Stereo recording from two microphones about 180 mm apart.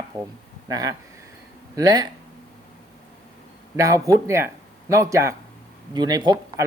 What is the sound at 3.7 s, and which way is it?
Speech, 20° right (ahead or behind).